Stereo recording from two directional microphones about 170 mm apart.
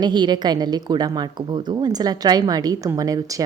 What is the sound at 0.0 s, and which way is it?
A woman's voice, 25° right (ahead or behind).